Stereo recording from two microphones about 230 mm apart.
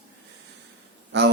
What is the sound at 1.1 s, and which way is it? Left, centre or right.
Speech, right.